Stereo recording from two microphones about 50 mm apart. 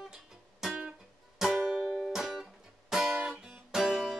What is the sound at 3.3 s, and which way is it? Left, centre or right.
Music, centre.